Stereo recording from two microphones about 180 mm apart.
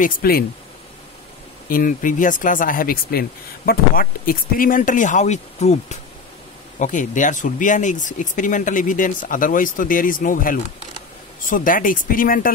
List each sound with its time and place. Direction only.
0.0 s speech: 55° left (ahead or behind)
1.7 s speech: 50° left (ahead or behind)